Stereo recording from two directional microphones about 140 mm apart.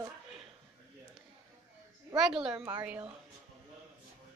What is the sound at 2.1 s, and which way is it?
Speech, 5° right (ahead or behind).